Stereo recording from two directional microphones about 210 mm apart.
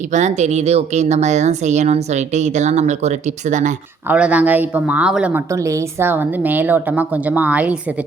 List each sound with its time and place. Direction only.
0.1 s speech: 35° right (ahead or behind)
4.1 s a woman's voice: 5° right (ahead or behind)